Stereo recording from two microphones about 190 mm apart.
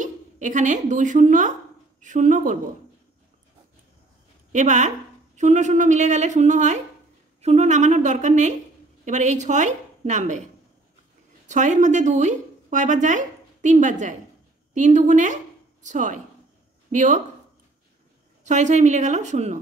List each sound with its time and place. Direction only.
0.0 s a woman's voice: 40° right (ahead or behind)
4.5 s a woman's voice: 40° right (ahead or behind)
11.4 s a woman's voice: 40° right (ahead or behind)
18.4 s a woman's voice: 40° right (ahead or behind)